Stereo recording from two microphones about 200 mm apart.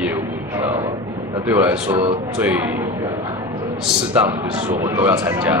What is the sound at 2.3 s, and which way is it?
Speech, 5° right (ahead or behind).